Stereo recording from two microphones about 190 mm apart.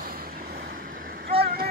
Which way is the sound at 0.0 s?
50° right (ahead or behind).